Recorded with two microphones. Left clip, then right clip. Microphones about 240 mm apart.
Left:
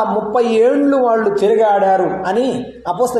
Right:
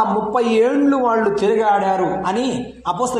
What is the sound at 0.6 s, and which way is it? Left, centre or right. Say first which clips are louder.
Speech: left 4 dB; right.